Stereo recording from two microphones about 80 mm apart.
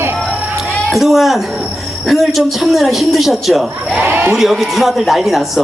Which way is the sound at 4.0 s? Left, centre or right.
Right.